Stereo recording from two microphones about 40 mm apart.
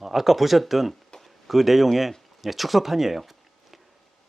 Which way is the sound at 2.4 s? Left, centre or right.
Centre.